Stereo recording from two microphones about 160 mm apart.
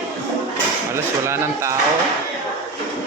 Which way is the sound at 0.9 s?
15° right (ahead or behind).